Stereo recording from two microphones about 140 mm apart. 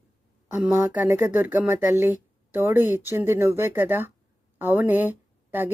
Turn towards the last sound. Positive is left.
turn(degrees=-15)  # may be behind; listen again after turning